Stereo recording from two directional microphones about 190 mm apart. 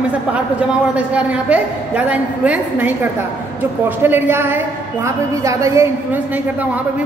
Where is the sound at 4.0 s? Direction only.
10° right (ahead or behind).